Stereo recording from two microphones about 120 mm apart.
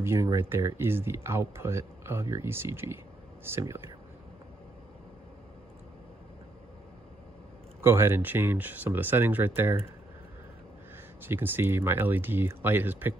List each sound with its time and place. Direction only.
0.0 s speech: 25° right (ahead or behind)
7.8 s speech: 20° right (ahead or behind)
11.2 s speech: 15° right (ahead or behind)